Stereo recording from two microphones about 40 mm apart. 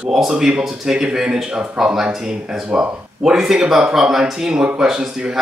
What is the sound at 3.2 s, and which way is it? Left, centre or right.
Speech, centre.